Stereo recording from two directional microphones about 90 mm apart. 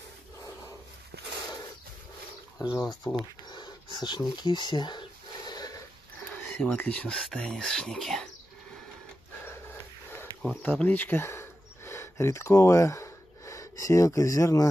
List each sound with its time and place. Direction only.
2.6 s speech: 40° left (ahead or behind)
3.5 s speech: 55° left (ahead or behind)
6.3 s speech: 15° left (ahead or behind)
10.6 s speech: 20° left (ahead or behind); by 14.7 s 35° left (ahead or behind)